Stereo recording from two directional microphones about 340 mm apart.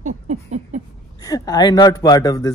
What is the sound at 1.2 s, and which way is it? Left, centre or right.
Speech, centre.